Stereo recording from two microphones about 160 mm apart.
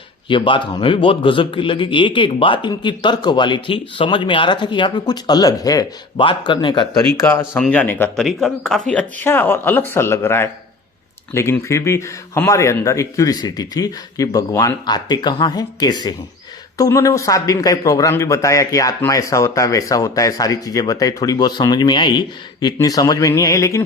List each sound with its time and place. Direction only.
0.3 s a man's voice: 30° left (ahead or behind)
7.3 s a man's voice: 15° left (ahead or behind)